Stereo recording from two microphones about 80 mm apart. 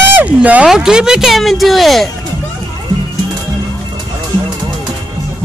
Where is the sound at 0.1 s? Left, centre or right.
Centre.